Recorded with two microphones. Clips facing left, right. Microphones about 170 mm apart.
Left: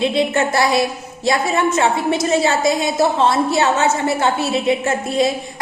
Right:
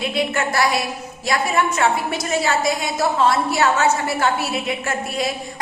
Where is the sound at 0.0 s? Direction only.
25° left (ahead or behind).